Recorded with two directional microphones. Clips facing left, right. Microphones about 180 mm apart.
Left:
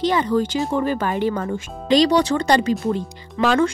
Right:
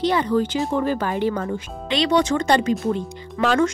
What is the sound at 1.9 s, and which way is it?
Speech, 35° left (ahead or behind).